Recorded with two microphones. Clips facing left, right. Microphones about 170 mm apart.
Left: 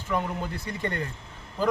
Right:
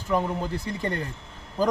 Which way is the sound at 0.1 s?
35° right (ahead or behind).